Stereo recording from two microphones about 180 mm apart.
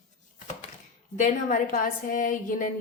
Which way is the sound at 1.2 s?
45° left (ahead or behind).